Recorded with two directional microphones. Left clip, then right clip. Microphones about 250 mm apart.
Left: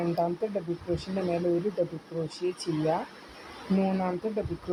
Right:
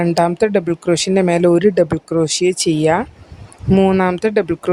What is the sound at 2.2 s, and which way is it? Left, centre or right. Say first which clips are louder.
Speech: right 15 dB; right.